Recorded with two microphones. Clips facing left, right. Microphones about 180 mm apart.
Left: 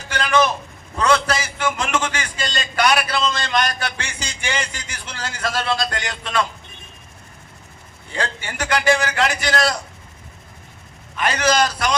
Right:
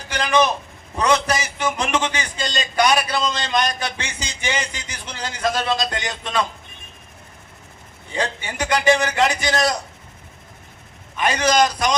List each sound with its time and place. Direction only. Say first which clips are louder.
0.1 s a sound: even; 15° right (ahead or behind)
4.0 s music: right 1 dB; 15° right (ahead or behind)
4.7 s a man's voice: even; 15° right (ahead or behind)
8.1 s a man's voice: right 1 dB; 15° right (ahead or behind)
11.2 s a man's voice: right 1 dB; 15° right (ahead or behind)